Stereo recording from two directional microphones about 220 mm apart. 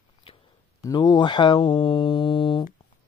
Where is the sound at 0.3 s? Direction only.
25° left (ahead or behind).